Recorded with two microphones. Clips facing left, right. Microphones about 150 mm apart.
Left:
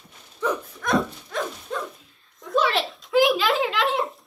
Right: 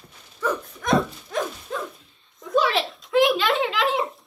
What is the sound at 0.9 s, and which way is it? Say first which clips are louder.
Dog: right 2 dB; centre (ahead or behind).